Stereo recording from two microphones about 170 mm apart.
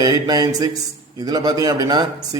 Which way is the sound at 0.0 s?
25° right (ahead or behind).